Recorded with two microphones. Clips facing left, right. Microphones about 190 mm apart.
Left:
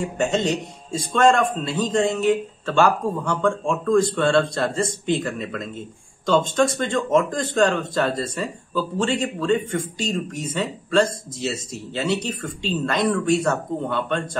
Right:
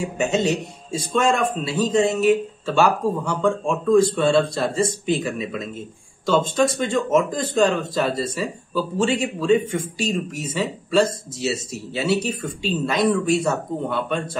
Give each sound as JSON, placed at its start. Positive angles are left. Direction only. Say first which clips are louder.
{"t": 0.2, "sound": "a man's voice", "louder": "right 1 dB", "side_deg": -5}